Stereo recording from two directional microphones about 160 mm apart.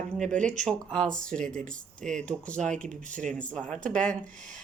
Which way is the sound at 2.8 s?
55° right (ahead or behind).